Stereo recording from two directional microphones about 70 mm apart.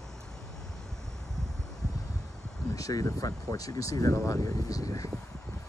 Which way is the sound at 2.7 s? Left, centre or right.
Left.